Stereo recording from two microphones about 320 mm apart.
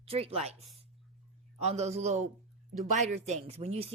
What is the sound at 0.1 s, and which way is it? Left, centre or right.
Speech, centre.